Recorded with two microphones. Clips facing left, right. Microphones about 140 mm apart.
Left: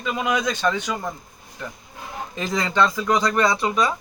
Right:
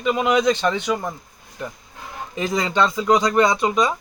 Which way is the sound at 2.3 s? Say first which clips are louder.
Right 1 dB; 15° right (ahead or behind).